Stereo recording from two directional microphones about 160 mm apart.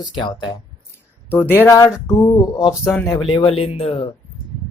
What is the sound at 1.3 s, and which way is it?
Speech, 15° left (ahead or behind).